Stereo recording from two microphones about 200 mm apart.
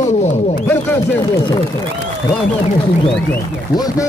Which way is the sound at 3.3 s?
20° left (ahead or behind).